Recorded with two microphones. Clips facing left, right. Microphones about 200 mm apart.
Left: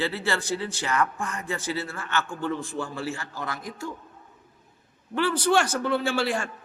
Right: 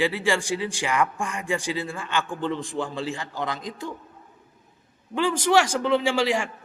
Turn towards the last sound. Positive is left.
turn(degrees=-10)  # may be behind; listen again after turning